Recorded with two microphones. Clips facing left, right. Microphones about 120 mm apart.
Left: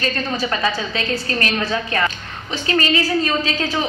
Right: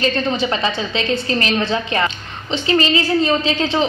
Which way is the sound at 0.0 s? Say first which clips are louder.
Right 4 dB; 25° right (ahead or behind).